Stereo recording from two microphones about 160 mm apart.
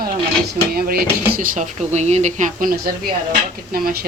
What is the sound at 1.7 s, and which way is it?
Speech, 45° right (ahead or behind).